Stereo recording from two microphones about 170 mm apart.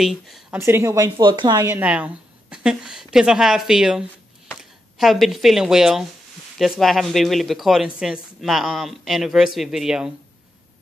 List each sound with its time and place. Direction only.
0.0 s speech: centre (ahead or behind)
0.6 s speech: 15° right (ahead or behind)